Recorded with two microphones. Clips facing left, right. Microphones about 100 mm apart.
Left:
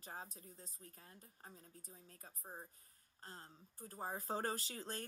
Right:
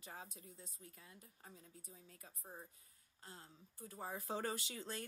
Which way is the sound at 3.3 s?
40° left (ahead or behind).